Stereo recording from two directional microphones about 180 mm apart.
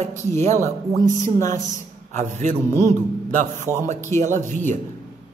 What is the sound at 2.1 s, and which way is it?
A man's voice, 40° right (ahead or behind).